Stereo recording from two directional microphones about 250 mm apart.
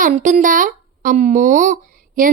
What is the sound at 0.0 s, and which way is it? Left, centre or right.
A woman's voice, right.